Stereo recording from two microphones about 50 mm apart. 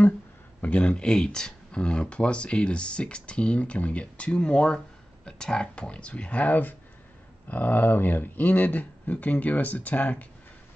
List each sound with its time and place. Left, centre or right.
0.6 s speech: left